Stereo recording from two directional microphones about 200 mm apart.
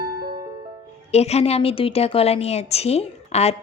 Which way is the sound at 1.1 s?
30° left (ahead or behind).